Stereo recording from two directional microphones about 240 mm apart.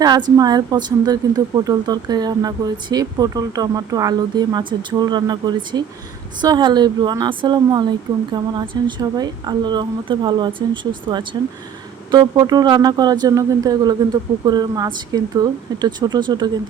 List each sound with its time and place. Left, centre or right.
0.0 s speech: centre